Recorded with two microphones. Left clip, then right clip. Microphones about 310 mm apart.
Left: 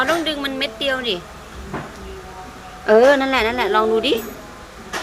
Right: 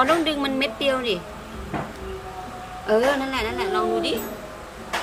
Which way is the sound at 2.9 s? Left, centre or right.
Centre.